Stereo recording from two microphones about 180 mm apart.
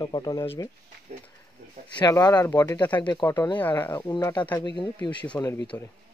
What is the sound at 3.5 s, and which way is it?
Speech, 10° left (ahead or behind).